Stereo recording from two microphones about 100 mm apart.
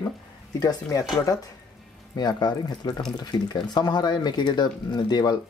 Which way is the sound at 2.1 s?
45° left (ahead or behind).